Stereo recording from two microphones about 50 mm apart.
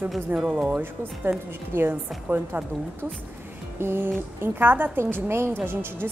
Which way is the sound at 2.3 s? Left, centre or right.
Right.